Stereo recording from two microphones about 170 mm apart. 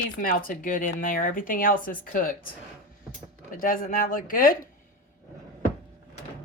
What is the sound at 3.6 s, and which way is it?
Speech, 55° left (ahead or behind).